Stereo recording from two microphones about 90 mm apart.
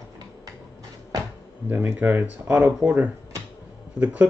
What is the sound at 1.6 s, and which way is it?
Speech, 20° right (ahead or behind).